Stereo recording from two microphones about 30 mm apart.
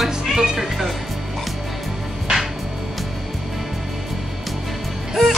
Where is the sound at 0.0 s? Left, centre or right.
Centre.